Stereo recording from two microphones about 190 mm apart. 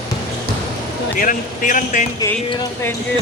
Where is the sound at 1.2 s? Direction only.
45° left (ahead or behind).